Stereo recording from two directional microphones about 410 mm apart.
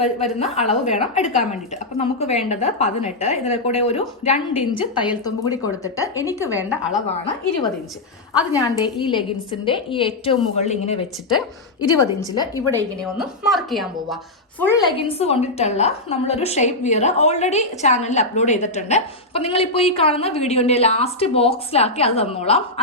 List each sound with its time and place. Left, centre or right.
0.3 s a woman's voice: centre
6.5 s a woman's voice: centre
8.5 s a woman's voice: centre